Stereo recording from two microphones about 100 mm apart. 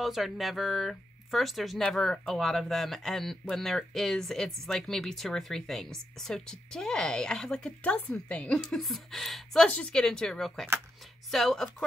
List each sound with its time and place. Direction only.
0.0 s speech: centre (ahead or behind)